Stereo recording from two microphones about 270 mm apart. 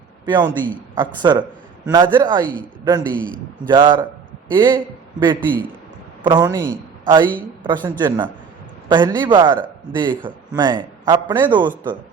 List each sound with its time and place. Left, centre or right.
0.3 s a man's voice: centre
3.2 s a man's voice: centre
3.7 s a man's voice: centre
6.2 s a woman's voice: centre